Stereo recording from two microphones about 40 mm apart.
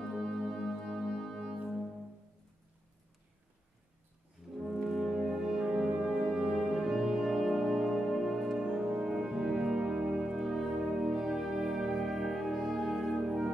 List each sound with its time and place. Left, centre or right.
0.1 s music: centre
4.4 s music: centre
9.0 s brass instrument: centre
9.5 s music: centre
10.3 s music: centre